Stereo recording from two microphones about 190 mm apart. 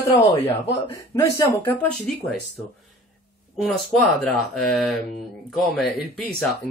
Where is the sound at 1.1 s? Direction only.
15° left (ahead or behind).